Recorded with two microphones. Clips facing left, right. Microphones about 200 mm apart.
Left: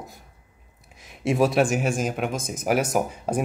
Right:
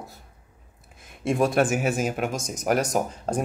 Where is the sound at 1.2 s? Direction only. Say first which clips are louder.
Left 1 dB; centre (ahead or behind).